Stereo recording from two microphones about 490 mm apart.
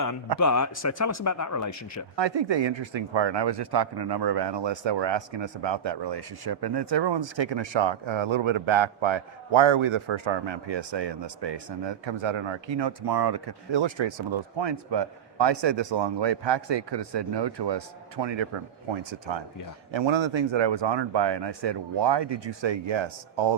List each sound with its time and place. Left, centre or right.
0.3 s speech: left
2.1 s speech: right